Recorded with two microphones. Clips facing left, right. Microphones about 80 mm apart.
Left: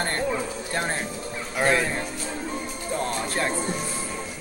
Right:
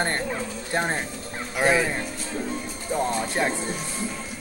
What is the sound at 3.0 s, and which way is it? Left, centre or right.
Speech, centre.